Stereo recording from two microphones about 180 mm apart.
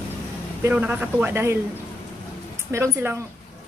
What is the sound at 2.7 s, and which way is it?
Speech, 15° right (ahead or behind).